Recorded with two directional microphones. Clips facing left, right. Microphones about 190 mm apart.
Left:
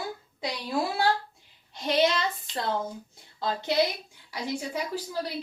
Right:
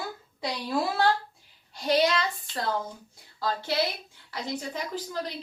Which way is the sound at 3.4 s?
20° left (ahead or behind).